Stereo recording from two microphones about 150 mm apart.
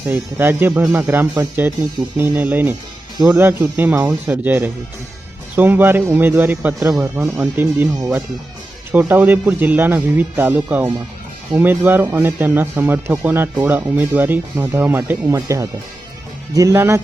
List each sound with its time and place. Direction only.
0.1 s speech: 15° right (ahead or behind)